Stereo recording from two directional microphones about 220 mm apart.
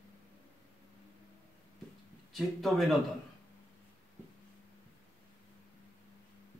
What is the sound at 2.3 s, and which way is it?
Speech, centre (ahead or behind).